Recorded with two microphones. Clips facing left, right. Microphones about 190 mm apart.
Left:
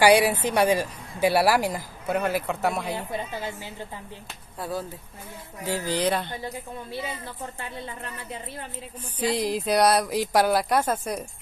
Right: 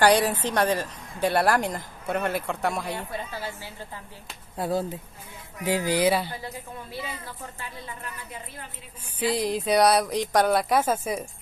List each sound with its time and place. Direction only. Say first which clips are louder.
0.0 s speech: left 2 dB; 10° left (ahead or behind)
3.1 s speech: left 2 dB; 20° left (ahead or behind)
4.6 s speech: right 5 dB; 25° right (ahead or behind); by 6.3 s 5° right (ahead or behind)
9.3 s speech: right 1 dB; centre (ahead or behind)